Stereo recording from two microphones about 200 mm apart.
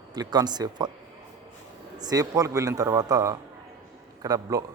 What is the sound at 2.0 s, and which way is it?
A man's voice, 20° right (ahead or behind).